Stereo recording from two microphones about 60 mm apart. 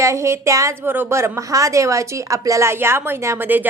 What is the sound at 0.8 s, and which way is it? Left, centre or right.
Speech, right.